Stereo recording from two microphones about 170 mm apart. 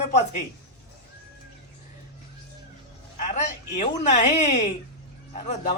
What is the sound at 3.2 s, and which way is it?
A woman's voice, 45° left (ahead or behind).